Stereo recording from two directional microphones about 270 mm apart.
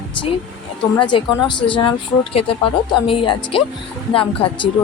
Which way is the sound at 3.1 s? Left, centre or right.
Centre.